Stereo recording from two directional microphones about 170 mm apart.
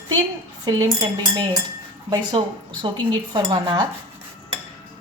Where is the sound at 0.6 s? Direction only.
25° right (ahead or behind).